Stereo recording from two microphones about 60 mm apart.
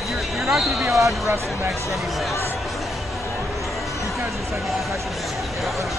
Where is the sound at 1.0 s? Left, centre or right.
Right.